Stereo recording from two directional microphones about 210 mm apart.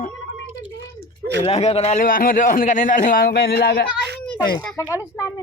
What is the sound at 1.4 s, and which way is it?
Speech, 30° left (ahead or behind).